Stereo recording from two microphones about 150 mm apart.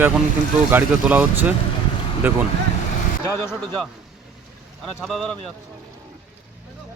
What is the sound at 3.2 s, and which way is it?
Speech, 15° left (ahead or behind).